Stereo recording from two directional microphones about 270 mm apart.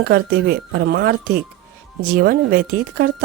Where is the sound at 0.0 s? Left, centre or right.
Right.